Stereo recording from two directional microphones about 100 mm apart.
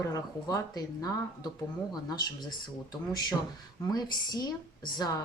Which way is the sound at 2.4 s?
45° left (ahead or behind).